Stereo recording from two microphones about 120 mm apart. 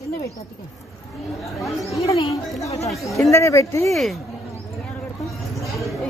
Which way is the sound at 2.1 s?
55° left (ahead or behind).